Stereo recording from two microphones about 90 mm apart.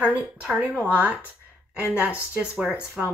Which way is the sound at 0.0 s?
20° right (ahead or behind).